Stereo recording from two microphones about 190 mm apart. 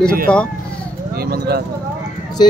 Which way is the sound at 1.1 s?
55° right (ahead or behind).